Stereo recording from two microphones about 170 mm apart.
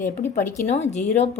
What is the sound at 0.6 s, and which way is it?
Speech, 40° left (ahead or behind).